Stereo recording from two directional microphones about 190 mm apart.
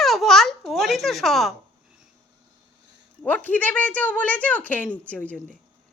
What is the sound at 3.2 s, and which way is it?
A woman's voice, 10° left (ahead or behind).